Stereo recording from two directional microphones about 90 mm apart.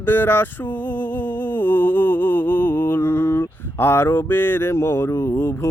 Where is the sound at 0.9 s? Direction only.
20° left (ahead or behind).